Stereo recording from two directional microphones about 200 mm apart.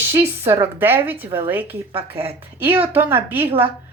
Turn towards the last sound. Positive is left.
turn(degrees=-10)  # may be behind; listen again after turning